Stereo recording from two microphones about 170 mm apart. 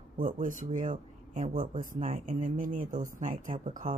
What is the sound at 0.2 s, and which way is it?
Speech, 50° right (ahead or behind).